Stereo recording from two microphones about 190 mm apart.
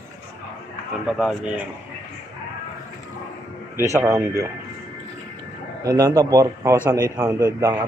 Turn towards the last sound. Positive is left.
turn(degrees=-15)  # may be behind; listen again after turning